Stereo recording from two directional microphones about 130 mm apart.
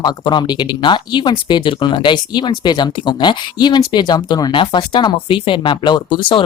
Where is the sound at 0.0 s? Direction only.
35° left (ahead or behind).